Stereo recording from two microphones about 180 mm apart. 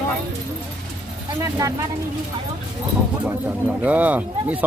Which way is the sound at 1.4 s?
20° right (ahead or behind).